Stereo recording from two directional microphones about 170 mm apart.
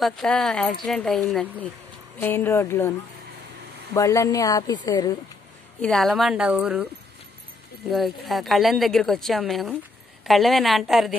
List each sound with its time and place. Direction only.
0.0 s a woman's voice: centre (ahead or behind); by 5.2 s 20° left (ahead or behind)
5.8 s a woman's voice: 5° left (ahead or behind)
7.9 s a woman's voice: centre (ahead or behind)